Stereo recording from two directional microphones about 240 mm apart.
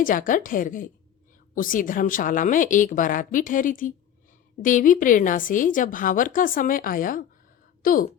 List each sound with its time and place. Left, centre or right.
0.0 s a woman's voice: left